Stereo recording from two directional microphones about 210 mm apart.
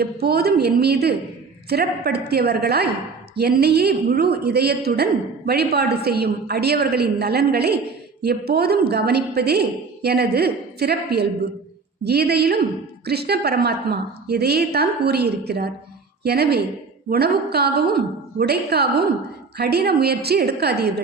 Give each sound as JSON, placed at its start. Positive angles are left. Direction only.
{"t": 0.0, "sound": "a woman's voice", "side_deg": -50}